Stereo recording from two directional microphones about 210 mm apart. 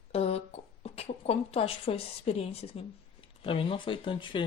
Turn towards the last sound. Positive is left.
turn(degrees=25)  # may be behind; listen again after turning